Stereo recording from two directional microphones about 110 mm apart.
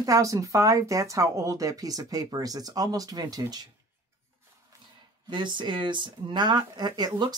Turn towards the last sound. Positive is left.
turn(degrees=-40)  # may be behind; listen again after turning